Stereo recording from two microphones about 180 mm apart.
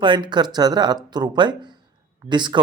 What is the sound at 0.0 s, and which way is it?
Speech, 25° right (ahead or behind).